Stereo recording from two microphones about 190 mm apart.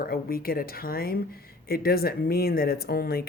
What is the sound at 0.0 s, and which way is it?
Speech, 50° left (ahead or behind).